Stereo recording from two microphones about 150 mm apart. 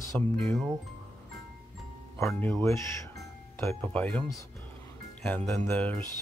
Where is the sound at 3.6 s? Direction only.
10° left (ahead or behind).